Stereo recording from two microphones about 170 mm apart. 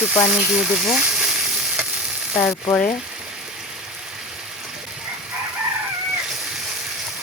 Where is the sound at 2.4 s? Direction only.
10° left (ahead or behind).